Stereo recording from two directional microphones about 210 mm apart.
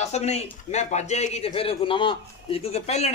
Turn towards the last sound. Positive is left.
turn(degrees=30)  # may be behind; listen again after turning